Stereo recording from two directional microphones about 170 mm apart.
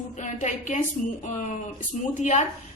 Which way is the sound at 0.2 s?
45° left (ahead or behind).